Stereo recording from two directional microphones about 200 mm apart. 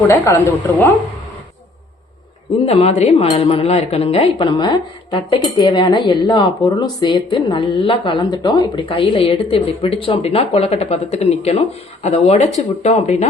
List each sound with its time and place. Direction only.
0.1 s a woman's voice: 15° left (ahead or behind)
2.6 s speech: 30° left (ahead or behind)